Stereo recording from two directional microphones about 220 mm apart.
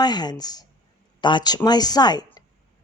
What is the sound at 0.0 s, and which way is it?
A woman's voice, 20° left (ahead or behind).